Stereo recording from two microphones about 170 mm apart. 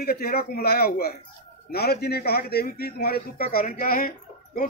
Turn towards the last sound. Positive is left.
turn(degrees=55)  # may be behind; listen again after turning